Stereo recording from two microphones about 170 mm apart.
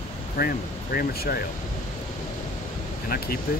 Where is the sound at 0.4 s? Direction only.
60° left (ahead or behind).